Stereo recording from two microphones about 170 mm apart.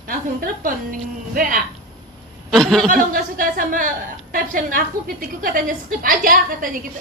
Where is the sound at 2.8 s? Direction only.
55° right (ahead or behind).